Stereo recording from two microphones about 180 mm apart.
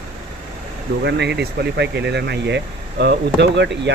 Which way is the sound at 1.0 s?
70° right (ahead or behind).